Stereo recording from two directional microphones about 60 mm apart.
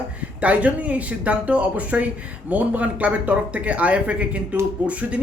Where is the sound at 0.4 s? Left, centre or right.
Right.